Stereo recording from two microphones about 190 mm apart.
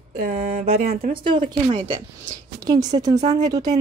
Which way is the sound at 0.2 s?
40° right (ahead or behind).